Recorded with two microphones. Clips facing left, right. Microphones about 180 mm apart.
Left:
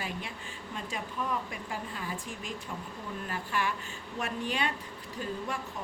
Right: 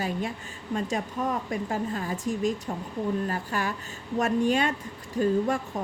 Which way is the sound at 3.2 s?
40° right (ahead or behind).